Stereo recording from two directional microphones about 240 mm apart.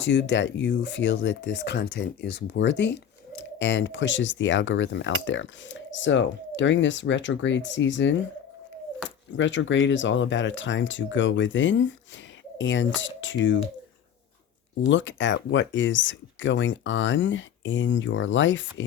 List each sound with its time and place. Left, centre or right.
0.0 s speech: left
14.8 s speech: left